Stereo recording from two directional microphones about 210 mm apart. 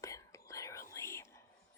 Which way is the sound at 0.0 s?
15° left (ahead or behind).